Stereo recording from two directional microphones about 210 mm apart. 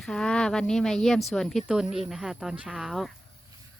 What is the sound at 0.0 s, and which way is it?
Speech, 5° left (ahead or behind).